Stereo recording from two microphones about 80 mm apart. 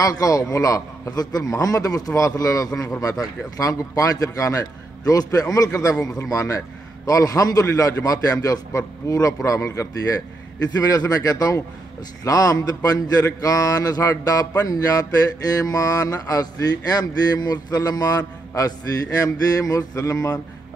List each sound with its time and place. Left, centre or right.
0.0 s a man's voice: left